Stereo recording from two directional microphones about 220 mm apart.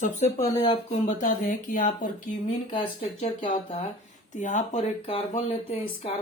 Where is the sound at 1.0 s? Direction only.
35° left (ahead or behind).